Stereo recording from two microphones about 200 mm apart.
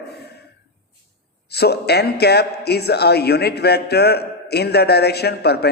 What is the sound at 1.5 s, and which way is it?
A man's voice, 55° left (ahead or behind).